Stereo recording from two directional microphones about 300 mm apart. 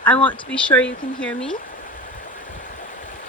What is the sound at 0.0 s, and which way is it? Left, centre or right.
Speech, centre.